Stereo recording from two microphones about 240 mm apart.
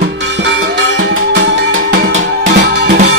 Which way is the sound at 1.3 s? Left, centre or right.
Right.